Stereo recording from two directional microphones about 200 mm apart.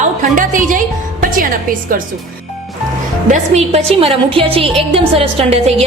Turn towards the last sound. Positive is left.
turn(degrees=-30)  # may be behind; listen again after turning